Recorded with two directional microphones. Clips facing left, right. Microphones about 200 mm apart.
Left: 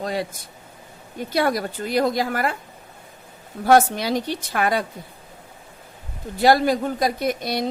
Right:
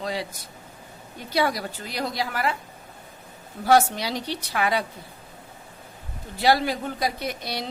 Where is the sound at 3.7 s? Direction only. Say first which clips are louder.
Left 3 dB; 50° left (ahead or behind).